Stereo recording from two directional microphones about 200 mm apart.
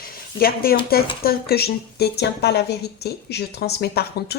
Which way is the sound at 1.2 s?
50° left (ahead or behind).